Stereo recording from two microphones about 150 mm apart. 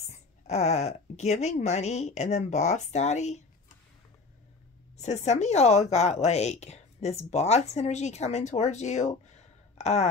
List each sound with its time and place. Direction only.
0.5 s a woman's voice: 45° left (ahead or behind)
4.9 s a woman's voice: 50° left (ahead or behind)